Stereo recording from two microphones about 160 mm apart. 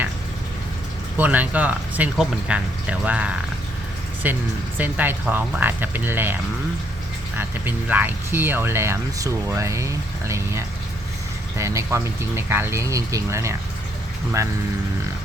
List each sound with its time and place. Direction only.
1.1 s speech: 10° right (ahead or behind)